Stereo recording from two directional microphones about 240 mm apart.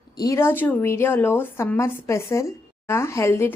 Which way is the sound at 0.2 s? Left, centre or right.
Centre.